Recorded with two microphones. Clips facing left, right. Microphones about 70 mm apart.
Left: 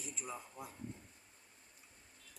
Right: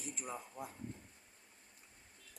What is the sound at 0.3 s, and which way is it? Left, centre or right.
Speech, centre.